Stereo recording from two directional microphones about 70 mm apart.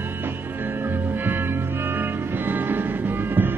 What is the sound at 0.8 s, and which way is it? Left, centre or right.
Music, right.